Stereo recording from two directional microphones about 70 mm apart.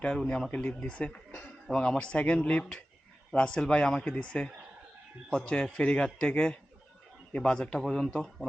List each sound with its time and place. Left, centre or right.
0.0 s speech: centre
1.3 s a sound: centre
1.7 s speech: centre